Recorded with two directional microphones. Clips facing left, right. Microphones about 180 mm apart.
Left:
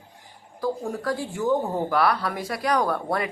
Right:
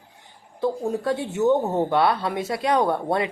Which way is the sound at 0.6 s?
25° right (ahead or behind).